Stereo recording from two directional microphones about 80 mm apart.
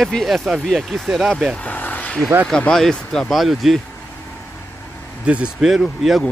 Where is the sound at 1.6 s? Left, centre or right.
Centre.